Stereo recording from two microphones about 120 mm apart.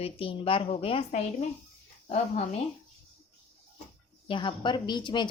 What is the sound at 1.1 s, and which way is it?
Speech, 75° left (ahead or behind).